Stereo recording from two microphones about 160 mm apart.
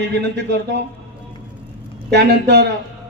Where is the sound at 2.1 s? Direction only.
90° right.